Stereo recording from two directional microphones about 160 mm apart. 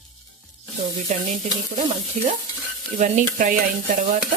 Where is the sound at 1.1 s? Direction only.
45° right (ahead or behind).